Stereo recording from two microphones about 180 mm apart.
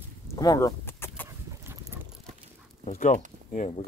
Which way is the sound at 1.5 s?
15° right (ahead or behind).